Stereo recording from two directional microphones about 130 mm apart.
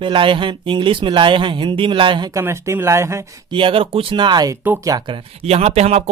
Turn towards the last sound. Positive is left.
turn(degrees=-55)  # may be behind; listen again after turning